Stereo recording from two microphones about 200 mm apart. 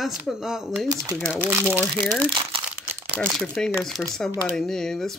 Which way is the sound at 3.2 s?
5° left (ahead or behind).